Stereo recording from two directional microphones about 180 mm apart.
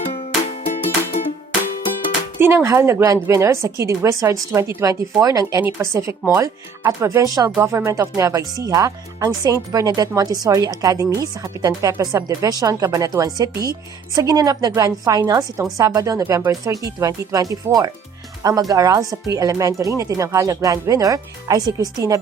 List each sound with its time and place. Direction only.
0.5 s music: 35° left (ahead or behind)
2.4 s a woman's voice: 15° right (ahead or behind)